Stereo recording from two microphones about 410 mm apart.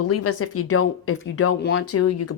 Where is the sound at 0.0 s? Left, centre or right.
Left.